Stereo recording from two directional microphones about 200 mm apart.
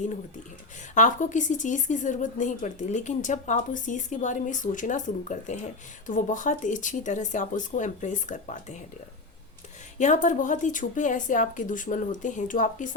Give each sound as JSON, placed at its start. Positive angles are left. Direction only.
{"t": 0.9, "sound": "speech", "side_deg": 40}
{"t": 10.0, "sound": "speech", "side_deg": 40}